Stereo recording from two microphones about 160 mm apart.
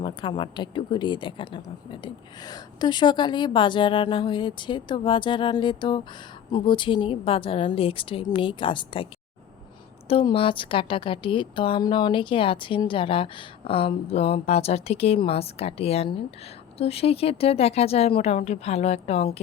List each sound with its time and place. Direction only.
0.0 s a woman's voice: 30° left (ahead or behind)
10.1 s a woman's voice: 35° left (ahead or behind)